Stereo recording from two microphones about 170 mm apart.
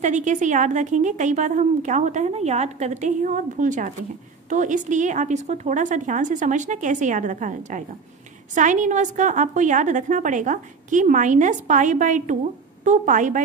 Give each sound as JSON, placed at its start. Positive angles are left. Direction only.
{"t": 0.0, "sound": "a woman's voice", "side_deg": -45}